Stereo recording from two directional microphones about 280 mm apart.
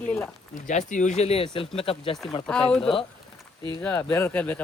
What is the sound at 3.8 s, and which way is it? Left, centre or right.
Speech, centre.